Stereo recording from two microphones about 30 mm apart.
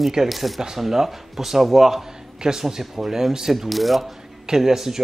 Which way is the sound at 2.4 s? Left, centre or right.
Right.